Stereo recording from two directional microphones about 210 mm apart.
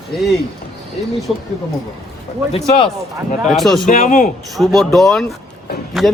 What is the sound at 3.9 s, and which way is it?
Speech, 40° left (ahead or behind).